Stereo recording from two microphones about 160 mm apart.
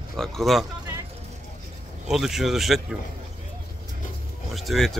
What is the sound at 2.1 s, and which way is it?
Speech, centre (ahead or behind).